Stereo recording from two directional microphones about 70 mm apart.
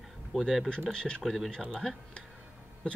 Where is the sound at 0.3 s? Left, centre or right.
Centre.